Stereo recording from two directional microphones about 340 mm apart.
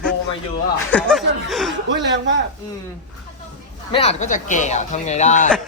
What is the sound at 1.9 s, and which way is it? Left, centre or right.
Speech, right.